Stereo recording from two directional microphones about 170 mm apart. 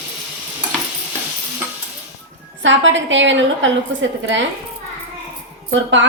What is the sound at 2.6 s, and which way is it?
A woman's voice, 90° right.